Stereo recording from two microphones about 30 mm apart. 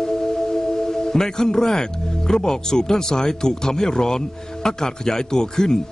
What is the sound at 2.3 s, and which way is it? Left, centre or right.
Speech, left.